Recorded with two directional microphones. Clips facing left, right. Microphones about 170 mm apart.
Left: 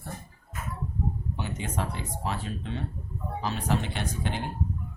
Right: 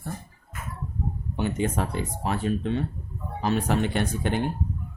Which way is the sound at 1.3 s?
55° right (ahead or behind).